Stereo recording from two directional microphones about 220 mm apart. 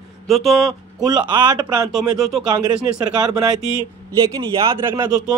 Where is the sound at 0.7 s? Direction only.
15° right (ahead or behind).